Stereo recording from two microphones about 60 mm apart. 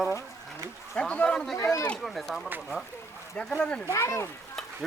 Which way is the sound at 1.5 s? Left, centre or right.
Left.